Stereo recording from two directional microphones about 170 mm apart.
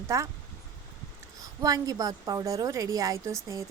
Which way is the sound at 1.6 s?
20° right (ahead or behind).